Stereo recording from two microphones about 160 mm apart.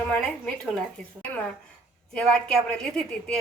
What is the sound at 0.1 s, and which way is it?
Speech, 5° left (ahead or behind).